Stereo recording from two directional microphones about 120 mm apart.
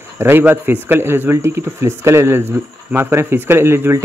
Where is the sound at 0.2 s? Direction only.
15° right (ahead or behind).